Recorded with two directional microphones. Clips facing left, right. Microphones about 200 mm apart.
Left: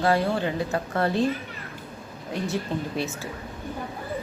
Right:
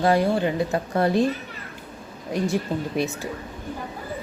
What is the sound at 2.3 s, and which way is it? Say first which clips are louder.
Speech: right 4 dB; 15° right (ahead or behind).